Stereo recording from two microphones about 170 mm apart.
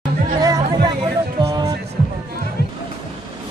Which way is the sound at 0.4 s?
20° right (ahead or behind).